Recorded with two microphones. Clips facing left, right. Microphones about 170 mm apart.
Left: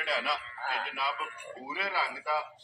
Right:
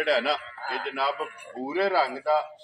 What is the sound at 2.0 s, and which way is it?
Speech, 35° right (ahead or behind).